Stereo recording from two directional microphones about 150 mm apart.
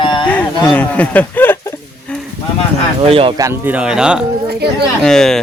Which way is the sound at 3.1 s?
40° right (ahead or behind).